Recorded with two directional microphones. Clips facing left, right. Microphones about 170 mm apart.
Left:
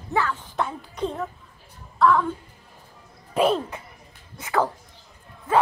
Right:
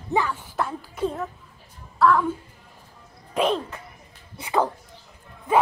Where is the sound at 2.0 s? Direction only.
5° right (ahead or behind).